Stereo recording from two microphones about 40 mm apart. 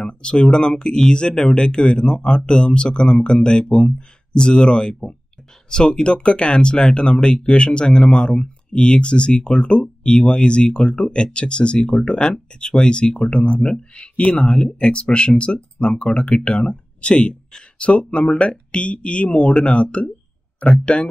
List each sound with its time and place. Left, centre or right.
0.0 s speech: left